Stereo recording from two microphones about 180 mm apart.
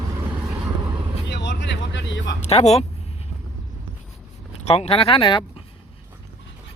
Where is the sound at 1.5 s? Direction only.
85° left.